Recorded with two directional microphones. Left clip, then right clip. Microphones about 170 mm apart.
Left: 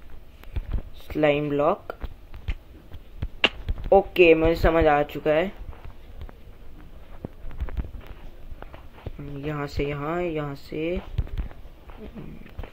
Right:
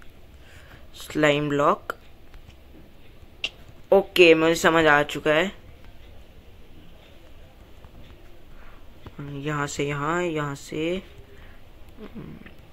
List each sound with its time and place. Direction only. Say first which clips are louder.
1.1 s speech: right 1 dB; 25° right (ahead or behind)
3.9 s speech: right 1 dB; 20° right (ahead or behind)
9.4 s speech: right 2 dB; 20° right (ahead or behind)